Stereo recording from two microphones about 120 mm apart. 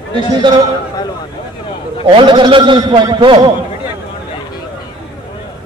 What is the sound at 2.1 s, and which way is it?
A man's voice, 40° right (ahead or behind).